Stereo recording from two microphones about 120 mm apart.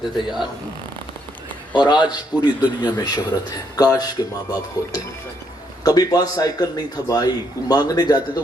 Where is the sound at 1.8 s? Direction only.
40° left (ahead or behind).